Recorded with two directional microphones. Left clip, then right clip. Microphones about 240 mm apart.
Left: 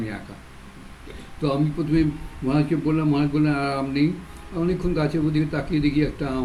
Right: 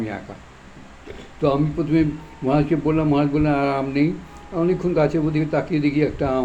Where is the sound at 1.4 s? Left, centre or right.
Centre.